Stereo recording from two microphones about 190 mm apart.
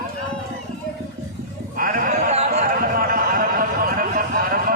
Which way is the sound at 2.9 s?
50° right (ahead or behind).